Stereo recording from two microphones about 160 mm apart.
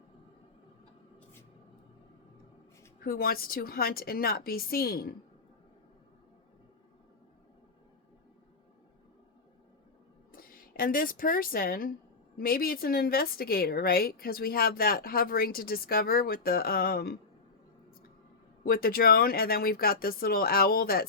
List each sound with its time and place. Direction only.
3.0 s a woman's voice: 65° left (ahead or behind)
10.3 s a woman's voice: 65° left (ahead or behind)
18.6 s a woman's voice: 65° left (ahead or behind)